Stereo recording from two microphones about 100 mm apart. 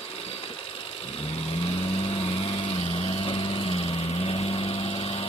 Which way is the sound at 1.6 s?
75° left (ahead or behind).